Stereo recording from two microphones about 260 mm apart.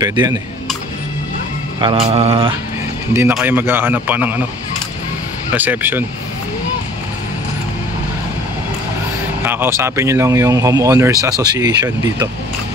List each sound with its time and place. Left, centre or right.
0.0 s speech: centre
1.8 s mantra: centre
3.1 s speech: centre
5.5 s speech: centre
9.4 s speech: centre